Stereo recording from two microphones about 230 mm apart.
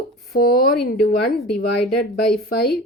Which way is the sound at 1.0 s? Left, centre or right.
Left.